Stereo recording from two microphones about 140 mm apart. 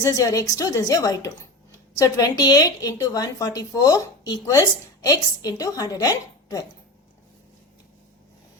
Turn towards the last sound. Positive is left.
turn(degrees=25)  # may be behind; listen again after turning